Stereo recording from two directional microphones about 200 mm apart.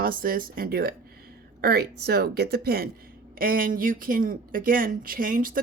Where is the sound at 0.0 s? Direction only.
45° right (ahead or behind).